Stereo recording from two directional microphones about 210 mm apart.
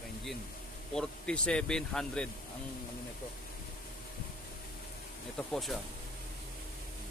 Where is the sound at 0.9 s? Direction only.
5° left (ahead or behind).